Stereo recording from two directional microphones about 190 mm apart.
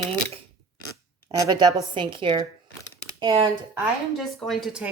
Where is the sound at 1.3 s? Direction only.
20° right (ahead or behind).